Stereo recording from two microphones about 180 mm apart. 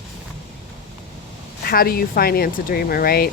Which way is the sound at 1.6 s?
55° left (ahead or behind).